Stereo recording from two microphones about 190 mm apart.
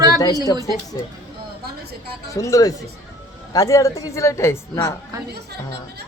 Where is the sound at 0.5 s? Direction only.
20° left (ahead or behind).